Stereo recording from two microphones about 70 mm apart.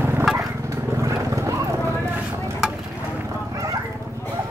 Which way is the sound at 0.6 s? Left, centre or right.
Right.